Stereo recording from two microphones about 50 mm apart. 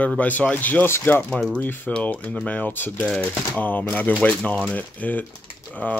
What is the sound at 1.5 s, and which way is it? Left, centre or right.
Speech, left.